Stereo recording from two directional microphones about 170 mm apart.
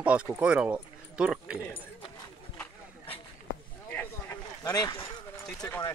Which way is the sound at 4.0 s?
20° left (ahead or behind).